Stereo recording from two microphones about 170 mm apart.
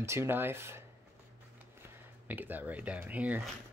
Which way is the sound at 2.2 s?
10° right (ahead or behind).